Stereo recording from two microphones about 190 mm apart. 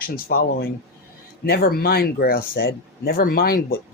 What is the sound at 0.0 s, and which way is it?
Speech, 50° left (ahead or behind).